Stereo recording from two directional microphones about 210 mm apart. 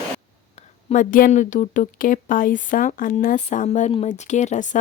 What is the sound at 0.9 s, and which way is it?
Speech, 40° left (ahead or behind).